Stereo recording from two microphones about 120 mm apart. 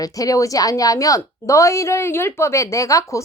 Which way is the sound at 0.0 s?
30° left (ahead or behind).